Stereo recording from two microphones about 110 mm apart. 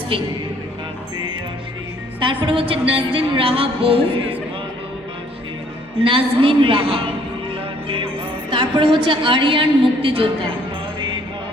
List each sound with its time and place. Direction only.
0.1 s a woman's voice: 55° right (ahead or behind)
2.2 s a woman's voice: 50° right (ahead or behind)
6.0 s a woman's voice: 55° right (ahead or behind)
8.4 s a woman's voice: 50° right (ahead or behind)